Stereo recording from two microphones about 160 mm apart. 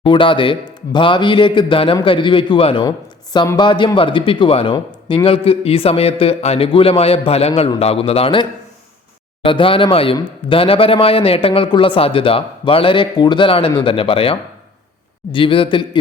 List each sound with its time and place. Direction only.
0.0 s speech: 30° left (ahead or behind)